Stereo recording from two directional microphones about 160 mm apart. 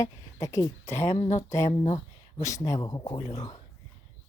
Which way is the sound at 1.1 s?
35° left (ahead or behind).